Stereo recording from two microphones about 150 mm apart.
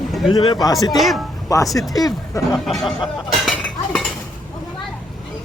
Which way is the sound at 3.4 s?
Centre (ahead or behind).